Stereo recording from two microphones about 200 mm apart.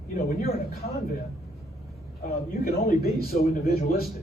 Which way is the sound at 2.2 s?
50° left (ahead or behind).